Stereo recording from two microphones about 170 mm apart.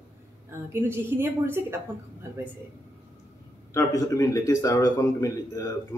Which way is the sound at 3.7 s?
20° left (ahead or behind).